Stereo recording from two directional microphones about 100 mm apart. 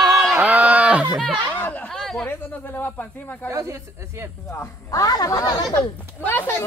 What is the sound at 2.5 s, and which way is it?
Speech, 20° left (ahead or behind).